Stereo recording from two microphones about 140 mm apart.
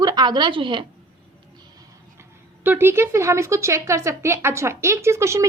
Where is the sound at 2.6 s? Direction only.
15° right (ahead or behind).